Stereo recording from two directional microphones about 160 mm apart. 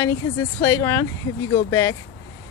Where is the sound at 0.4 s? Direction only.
15° left (ahead or behind).